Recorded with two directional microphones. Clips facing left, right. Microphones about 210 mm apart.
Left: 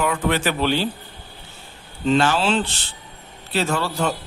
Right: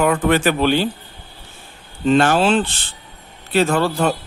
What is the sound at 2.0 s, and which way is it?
Speech, 55° right (ahead or behind).